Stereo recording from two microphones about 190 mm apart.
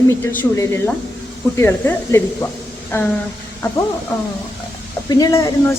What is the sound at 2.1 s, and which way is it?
Speech, 15° left (ahead or behind).